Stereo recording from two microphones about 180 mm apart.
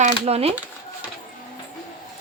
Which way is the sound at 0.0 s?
35° right (ahead or behind).